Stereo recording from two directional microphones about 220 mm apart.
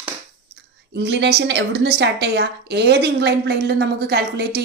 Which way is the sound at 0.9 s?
50° right (ahead or behind).